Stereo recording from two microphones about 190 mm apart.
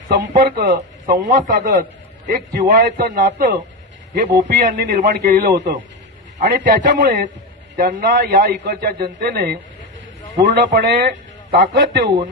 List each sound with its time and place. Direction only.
0.1 s a man's voice: 60° right (ahead or behind); by 3.5 s 45° right (ahead or behind)
4.1 s a man's voice: 55° right (ahead or behind)
10.8 s a man's voice: 55° right (ahead or behind)